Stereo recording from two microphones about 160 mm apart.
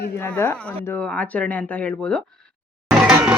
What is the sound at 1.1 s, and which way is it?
Speech, 10° left (ahead or behind).